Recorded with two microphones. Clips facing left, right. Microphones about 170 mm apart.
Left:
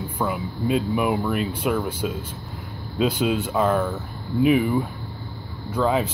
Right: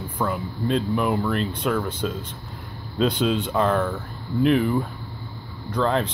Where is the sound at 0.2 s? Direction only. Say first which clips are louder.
Even; 10° left (ahead or behind).